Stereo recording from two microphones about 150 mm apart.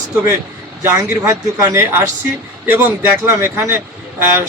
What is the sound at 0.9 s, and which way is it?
A man's voice, 20° right (ahead or behind).